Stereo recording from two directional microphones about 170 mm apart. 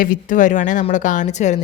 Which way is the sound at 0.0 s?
50° left (ahead or behind).